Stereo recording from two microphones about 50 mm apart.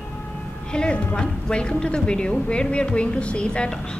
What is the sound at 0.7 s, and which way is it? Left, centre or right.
A woman's voice, centre.